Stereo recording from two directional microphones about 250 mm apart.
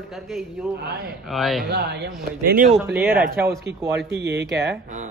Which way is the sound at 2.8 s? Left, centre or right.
Centre.